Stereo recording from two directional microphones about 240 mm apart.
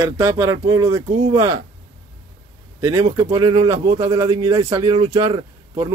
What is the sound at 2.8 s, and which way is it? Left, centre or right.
Speech, centre.